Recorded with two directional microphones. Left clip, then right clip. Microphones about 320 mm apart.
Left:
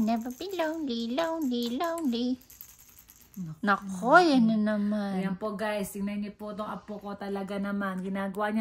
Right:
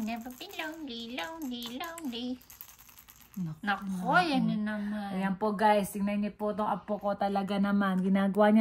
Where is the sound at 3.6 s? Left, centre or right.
Centre.